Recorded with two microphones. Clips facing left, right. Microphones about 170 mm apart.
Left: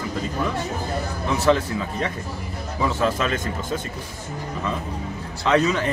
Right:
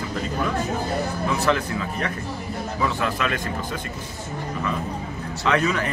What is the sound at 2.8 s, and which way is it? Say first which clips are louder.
Speech: left 3 dB; 30° left (ahead or behind).